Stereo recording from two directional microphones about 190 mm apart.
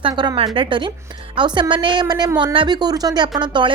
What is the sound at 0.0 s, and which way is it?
A woman's voice, 20° right (ahead or behind).